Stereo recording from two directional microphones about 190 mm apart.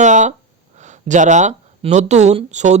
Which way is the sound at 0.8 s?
40° right (ahead or behind).